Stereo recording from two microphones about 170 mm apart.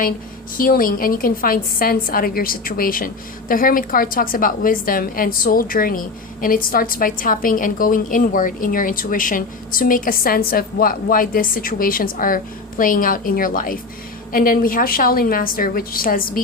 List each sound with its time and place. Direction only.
0.5 s a woman's voice: 55° left (ahead or behind)